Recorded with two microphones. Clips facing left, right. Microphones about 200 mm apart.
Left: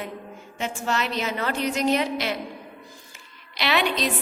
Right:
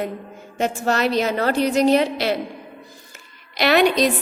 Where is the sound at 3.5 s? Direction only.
45° right (ahead or behind).